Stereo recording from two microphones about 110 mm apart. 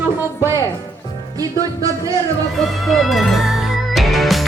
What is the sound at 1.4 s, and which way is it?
Music, 30° right (ahead or behind).